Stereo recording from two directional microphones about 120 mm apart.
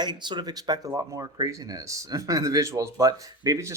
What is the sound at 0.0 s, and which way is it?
Speech, 40° right (ahead or behind).